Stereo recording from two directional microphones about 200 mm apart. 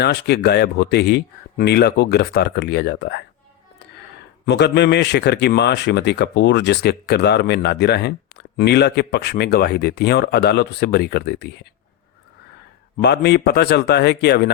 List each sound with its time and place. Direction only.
0.0 s a man's voice: 55° left (ahead or behind)
4.4 s a man's voice: 55° left (ahead or behind)
13.0 s a man's voice: 55° left (ahead or behind)